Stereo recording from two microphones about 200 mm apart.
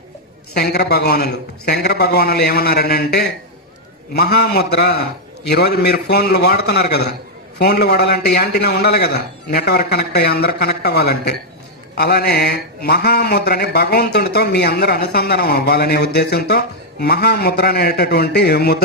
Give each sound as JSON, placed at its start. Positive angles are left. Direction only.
{"t": 0.5, "sound": "speech", "side_deg": 55}